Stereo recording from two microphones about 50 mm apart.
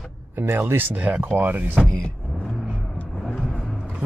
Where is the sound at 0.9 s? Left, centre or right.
Right.